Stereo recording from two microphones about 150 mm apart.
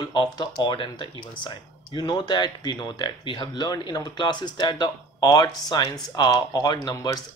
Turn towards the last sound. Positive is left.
turn(degrees=25)  # may be behind; listen again after turning